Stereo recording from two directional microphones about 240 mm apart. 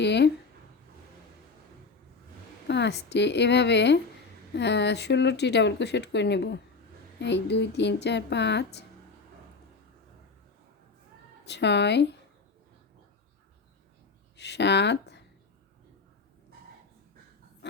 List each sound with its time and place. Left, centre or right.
0.0 s a sound: left
2.6 s speech: left
11.4 s speech: left
14.3 s speech: left